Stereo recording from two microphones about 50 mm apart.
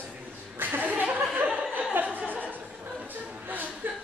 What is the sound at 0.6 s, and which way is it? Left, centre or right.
Chuckle, right.